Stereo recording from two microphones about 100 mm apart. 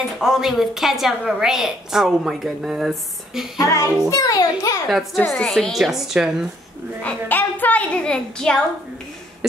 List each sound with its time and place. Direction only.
0.2 s a woman's voice: 5° right (ahead or behind)
3.5 s a child's voice: 30° left (ahead or behind)
4.8 s a woman's voice: centre (ahead or behind)
7.0 s a woman's voice: 15° left (ahead or behind)